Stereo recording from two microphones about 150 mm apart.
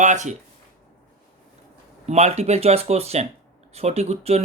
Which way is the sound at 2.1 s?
45° right (ahead or behind).